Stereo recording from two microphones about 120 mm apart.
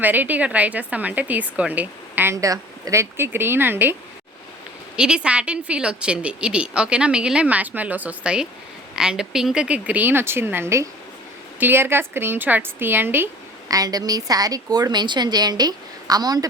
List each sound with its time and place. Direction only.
0.0 s a woman's voice: 15° right (ahead or behind)
4.9 s a woman's voice: 5° right (ahead or behind)
13.7 s a woman's voice: 30° right (ahead or behind)